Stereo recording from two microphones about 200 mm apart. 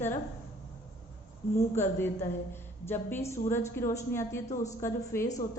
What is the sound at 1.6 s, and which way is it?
A woman's voice, 15° left (ahead or behind).